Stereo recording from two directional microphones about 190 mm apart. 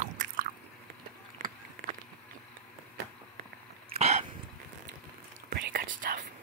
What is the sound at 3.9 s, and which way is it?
Throat clearing, 35° right (ahead or behind).